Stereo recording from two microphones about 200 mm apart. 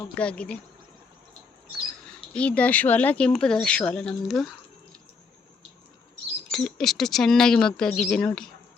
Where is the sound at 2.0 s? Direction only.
5° left (ahead or behind).